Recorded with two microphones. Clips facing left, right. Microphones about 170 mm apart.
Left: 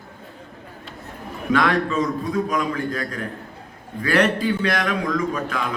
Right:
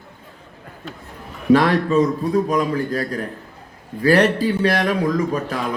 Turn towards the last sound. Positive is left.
turn(degrees=-35)  # may be behind; listen again after turning